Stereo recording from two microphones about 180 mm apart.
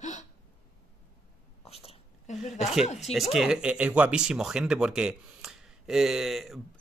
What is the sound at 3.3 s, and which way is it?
Speech, centre (ahead or behind).